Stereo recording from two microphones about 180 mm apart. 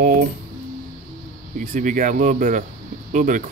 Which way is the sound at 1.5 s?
45° right (ahead or behind).